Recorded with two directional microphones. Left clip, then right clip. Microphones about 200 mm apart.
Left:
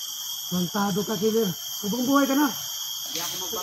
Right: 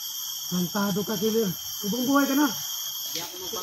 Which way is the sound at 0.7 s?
10° right (ahead or behind).